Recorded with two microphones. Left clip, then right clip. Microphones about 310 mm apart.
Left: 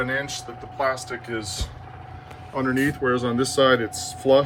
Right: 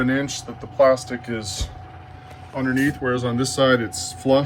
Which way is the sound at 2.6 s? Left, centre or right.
Left.